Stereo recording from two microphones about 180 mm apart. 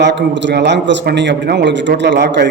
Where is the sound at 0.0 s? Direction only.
75° right (ahead or behind).